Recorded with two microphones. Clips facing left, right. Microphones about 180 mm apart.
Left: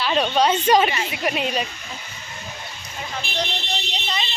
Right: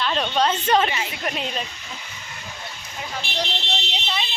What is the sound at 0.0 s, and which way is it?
Speech, 5° left (ahead or behind).